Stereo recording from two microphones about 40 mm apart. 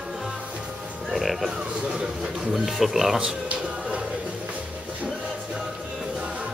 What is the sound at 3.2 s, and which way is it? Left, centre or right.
Music, right.